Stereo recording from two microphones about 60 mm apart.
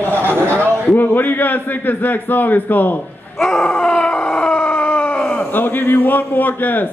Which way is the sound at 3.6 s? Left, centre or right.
Centre.